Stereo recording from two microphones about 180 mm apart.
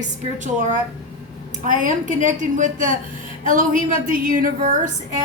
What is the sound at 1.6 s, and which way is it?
A woman's voice, 45° right (ahead or behind).